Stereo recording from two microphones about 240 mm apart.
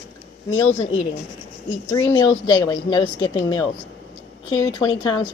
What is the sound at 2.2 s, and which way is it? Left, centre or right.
A woman's voice, centre.